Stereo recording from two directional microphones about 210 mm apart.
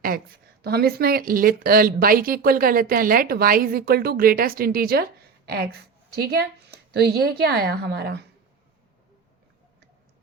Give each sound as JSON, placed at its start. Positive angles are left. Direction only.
{"t": 0.6, "sound": "speech", "side_deg": -50}